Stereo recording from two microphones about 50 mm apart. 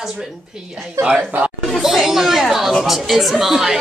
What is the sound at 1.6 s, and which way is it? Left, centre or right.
Speech, centre.